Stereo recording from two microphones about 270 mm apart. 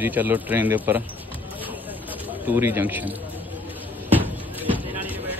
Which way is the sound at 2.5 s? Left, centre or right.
Centre.